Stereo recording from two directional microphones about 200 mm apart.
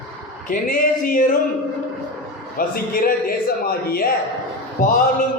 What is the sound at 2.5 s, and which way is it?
A man's voice, 45° left (ahead or behind).